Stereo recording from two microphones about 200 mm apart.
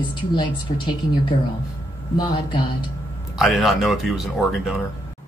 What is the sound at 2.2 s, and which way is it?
Speech, 25° left (ahead or behind).